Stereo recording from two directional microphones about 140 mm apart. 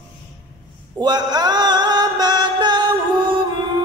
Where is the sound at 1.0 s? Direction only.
30° right (ahead or behind).